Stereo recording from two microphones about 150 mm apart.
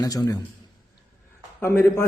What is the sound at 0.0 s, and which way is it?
Speech, 25° left (ahead or behind).